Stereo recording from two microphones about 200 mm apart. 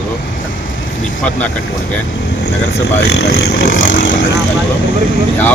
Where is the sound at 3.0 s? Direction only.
55° left (ahead or behind).